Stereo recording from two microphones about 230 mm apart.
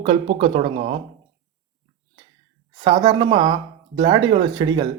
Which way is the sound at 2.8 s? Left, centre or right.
Centre.